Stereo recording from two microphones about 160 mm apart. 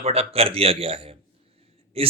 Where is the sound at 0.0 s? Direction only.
40° right (ahead or behind).